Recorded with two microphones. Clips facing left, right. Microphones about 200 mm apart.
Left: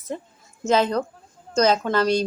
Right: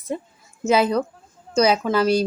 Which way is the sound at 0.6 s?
10° right (ahead or behind).